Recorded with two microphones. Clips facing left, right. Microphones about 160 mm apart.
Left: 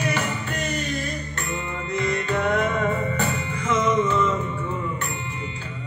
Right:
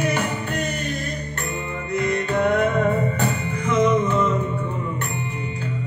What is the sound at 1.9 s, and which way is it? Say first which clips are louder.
Music: right 2 dB; 55° right (ahead or behind).